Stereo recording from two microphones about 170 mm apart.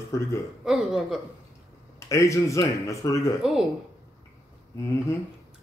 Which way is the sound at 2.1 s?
20° left (ahead or behind).